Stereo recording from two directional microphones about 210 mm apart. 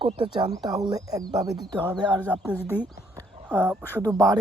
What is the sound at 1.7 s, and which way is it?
Speech, 5° left (ahead or behind).